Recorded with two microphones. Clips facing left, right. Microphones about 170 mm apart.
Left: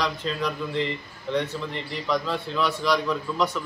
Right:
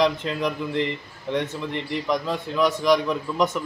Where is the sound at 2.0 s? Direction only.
15° right (ahead or behind).